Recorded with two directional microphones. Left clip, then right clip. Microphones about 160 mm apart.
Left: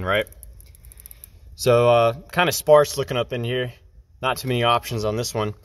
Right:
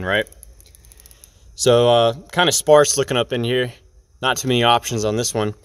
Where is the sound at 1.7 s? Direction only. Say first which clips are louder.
Right 2 dB; 30° right (ahead or behind).